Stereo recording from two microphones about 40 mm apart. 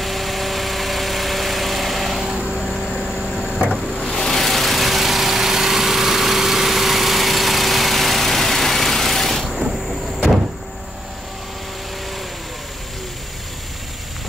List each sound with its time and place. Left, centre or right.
0.0 s vehicle: centre
2.5 s vehicle: centre